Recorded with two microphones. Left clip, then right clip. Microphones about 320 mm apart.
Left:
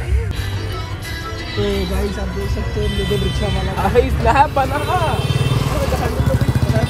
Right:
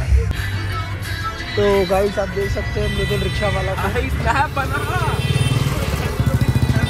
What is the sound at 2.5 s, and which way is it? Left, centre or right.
Speech, centre.